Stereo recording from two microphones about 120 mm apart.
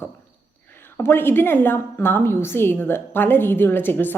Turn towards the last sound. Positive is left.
turn(degrees=15)  # may be behind; listen again after turning